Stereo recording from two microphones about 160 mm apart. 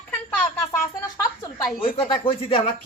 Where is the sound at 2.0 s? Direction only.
35° left (ahead or behind).